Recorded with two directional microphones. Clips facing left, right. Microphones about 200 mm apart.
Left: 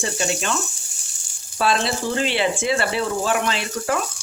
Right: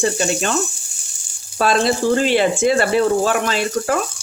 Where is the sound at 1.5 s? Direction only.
45° right (ahead or behind).